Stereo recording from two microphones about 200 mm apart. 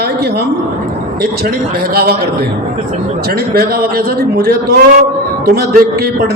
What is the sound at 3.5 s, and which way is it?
A man's voice, 50° right (ahead or behind).